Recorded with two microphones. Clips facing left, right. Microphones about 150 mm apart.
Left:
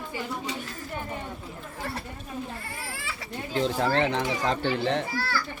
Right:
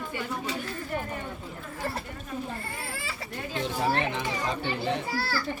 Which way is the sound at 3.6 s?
90° left.